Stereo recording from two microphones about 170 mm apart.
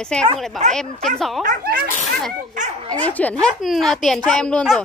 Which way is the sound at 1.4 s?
55° right (ahead or behind).